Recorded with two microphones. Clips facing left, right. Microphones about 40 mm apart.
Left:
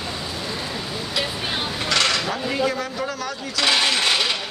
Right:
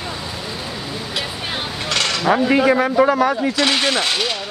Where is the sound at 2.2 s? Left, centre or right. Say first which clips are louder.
Right 9 dB; right.